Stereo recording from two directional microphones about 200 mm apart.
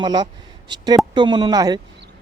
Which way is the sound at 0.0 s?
20° right (ahead or behind).